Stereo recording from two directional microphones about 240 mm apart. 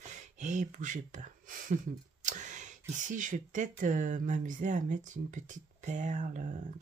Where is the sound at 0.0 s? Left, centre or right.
Right.